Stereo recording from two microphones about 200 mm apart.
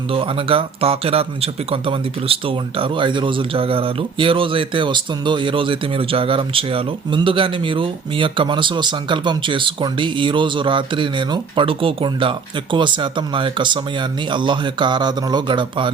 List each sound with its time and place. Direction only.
0.1 s speech: 25° right (ahead or behind)